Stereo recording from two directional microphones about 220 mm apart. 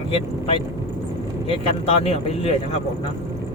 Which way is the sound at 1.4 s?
25° left (ahead or behind).